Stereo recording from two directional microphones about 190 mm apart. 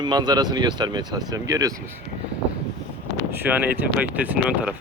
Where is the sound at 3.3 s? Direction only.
10° right (ahead or behind).